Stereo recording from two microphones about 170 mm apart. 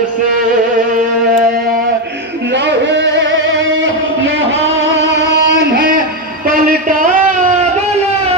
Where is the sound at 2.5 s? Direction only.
90° right.